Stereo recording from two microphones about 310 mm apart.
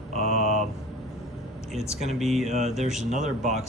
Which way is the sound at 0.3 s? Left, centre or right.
Left.